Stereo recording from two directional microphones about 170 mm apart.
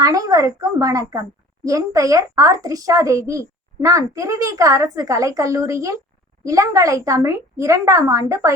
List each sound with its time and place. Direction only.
0.0 s a child's voice: 20° right (ahead or behind)